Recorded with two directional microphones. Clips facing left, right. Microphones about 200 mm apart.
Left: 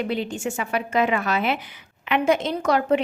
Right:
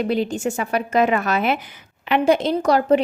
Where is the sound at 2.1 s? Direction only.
35° right (ahead or behind).